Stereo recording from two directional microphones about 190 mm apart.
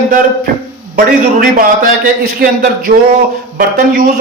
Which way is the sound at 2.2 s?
50° right (ahead or behind).